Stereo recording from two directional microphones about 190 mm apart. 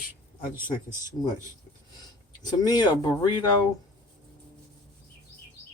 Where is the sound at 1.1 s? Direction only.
20° left (ahead or behind).